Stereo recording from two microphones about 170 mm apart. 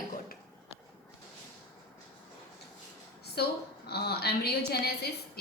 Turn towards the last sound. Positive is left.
turn(degrees=70)  # may be behind; listen again after turning